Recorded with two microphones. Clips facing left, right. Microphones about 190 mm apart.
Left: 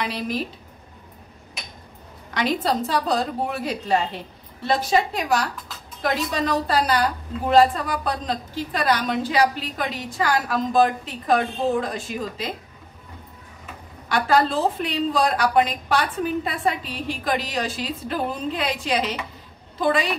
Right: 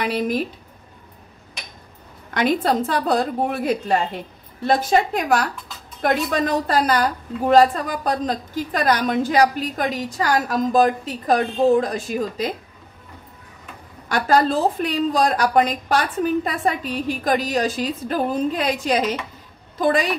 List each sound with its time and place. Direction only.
0.0 s a woman's voice: 50° right (ahead or behind)
2.3 s a woman's voice: 55° right (ahead or behind)
14.0 s a woman's voice: 45° right (ahead or behind)